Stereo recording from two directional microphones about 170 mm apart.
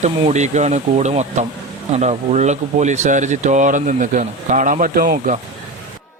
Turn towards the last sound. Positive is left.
turn(degrees=-55)  # may be behind; listen again after turning